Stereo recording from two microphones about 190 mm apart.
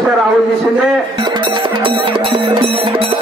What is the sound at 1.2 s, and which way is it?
Music, 25° right (ahead or behind).